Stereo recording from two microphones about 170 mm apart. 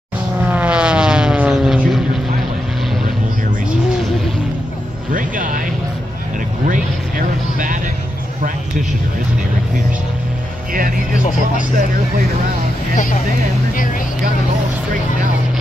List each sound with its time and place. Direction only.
0.5 s vehicle: 5° right (ahead or behind)
5.1 s music: 55° right (ahead or behind)
6.7 s vehicle: 50° right (ahead or behind)
12.9 s vehicle: 50° left (ahead or behind)